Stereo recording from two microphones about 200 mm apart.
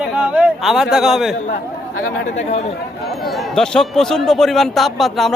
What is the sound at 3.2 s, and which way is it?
A man's voice, centre (ahead or behind).